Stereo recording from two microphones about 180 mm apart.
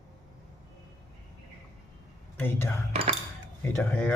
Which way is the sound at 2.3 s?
10° left (ahead or behind).